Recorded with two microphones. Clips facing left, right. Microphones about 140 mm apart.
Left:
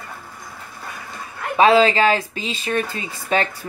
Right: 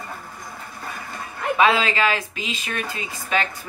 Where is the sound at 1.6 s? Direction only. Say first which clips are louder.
Left 6 dB; 35° left (ahead or behind).